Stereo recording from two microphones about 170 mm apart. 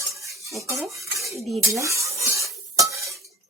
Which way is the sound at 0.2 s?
20° right (ahead or behind).